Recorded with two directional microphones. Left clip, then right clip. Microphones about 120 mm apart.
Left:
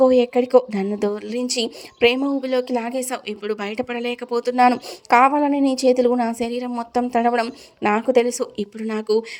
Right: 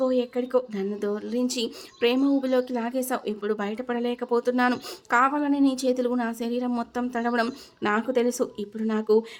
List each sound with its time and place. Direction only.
0.0 s a woman's voice: 50° left (ahead or behind)
8.8 s speech: 50° left (ahead or behind)